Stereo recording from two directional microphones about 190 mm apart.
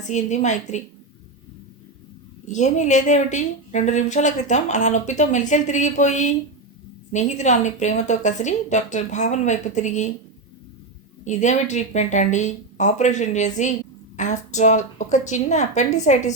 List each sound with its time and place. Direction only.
0.1 s a woman's voice: 40° left (ahead or behind)
2.5 s a woman's voice: 40° left (ahead or behind)
11.3 s a woman's voice: 40° left (ahead or behind)